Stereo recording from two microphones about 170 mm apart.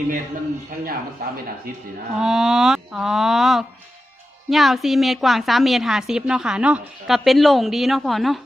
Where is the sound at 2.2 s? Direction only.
Centre (ahead or behind).